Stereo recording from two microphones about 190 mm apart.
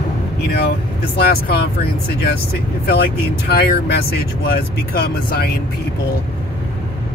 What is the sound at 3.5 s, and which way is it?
Speech, 55° left (ahead or behind).